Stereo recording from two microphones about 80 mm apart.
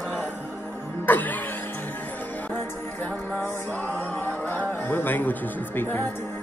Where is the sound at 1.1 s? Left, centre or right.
Left.